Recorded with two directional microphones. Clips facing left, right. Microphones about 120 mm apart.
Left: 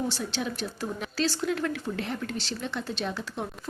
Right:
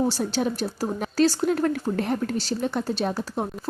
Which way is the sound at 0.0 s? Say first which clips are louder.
Right 7 dB; 40° right (ahead or behind).